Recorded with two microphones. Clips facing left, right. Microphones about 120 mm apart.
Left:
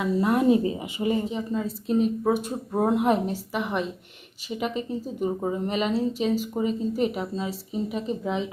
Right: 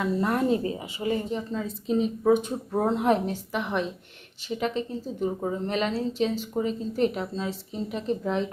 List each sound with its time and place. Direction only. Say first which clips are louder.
0.0 s a woman's voice: left 3 dB; 10° left (ahead or behind)
1.3 s a woman's voice: left 2 dB; 5° left (ahead or behind)